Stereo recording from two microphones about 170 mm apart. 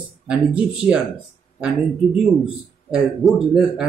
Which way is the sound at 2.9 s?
Centre (ahead or behind).